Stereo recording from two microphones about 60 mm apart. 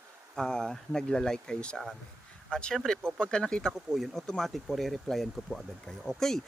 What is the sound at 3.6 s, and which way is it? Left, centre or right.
Speech, centre.